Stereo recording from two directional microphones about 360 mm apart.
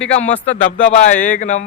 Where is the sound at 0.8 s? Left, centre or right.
Centre.